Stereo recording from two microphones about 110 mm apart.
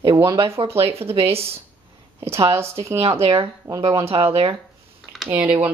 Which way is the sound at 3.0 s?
60° right (ahead or behind).